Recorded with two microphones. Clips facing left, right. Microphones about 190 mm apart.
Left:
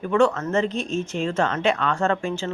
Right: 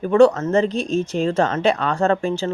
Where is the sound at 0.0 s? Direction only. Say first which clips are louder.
Right 6 dB; 35° right (ahead or behind).